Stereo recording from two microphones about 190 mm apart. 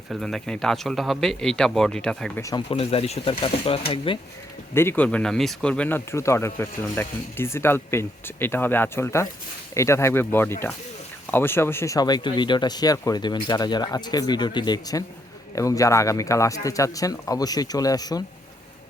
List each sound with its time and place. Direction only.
0.1 s speech: centre (ahead or behind)
2.6 s speech: 30° left (ahead or behind)
4.7 s speech: 10° left (ahead or behind)